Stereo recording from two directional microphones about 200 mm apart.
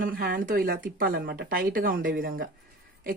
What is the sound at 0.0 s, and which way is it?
Speech, 45° right (ahead or behind).